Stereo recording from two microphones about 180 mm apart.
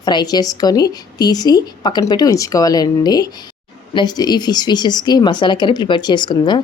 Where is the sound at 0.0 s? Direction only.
25° left (ahead or behind).